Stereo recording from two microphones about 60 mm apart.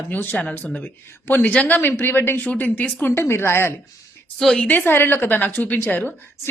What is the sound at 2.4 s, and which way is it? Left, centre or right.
Speech, left.